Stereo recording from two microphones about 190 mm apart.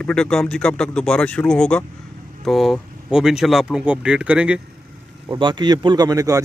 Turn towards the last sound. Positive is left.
turn(degrees=-20)  # may be behind; listen again after turning